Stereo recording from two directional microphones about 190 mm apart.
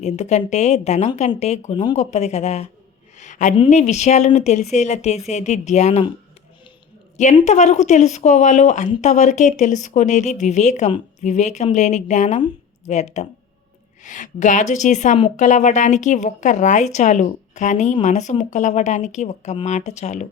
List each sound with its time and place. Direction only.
0.0 s speech: 35° left (ahead or behind)
2.0 s speech: 35° left (ahead or behind)
3.2 s a sound: 40° left (ahead or behind)
3.5 s speech: 30° left (ahead or behind)
7.3 s speech: 35° left (ahead or behind)